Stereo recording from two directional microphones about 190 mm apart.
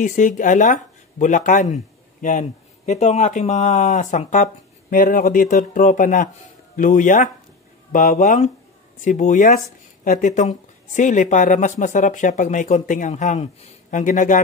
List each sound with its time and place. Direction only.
0.0 s speech: 40° left (ahead or behind)